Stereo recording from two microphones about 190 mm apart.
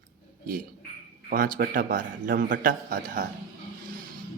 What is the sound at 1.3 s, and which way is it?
Speech, 50° right (ahead or behind).